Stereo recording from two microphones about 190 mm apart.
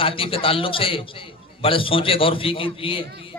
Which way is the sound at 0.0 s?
30° left (ahead or behind).